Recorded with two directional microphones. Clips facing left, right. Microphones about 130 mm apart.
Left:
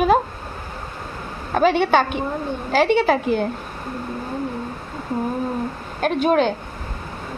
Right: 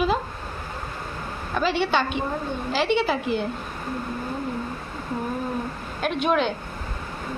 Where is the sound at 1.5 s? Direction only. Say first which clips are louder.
Left 6 dB; 55° left (ahead or behind).